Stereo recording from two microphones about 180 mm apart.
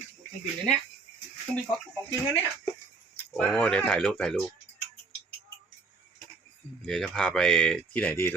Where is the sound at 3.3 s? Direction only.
5° left (ahead or behind).